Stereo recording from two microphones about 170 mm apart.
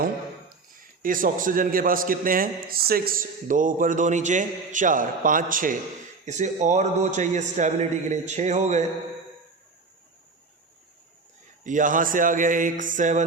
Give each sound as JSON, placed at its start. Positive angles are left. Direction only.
{"t": 0.8, "sound": "a man's voice", "side_deg": -55}
{"t": 11.6, "sound": "a man's voice", "side_deg": -50}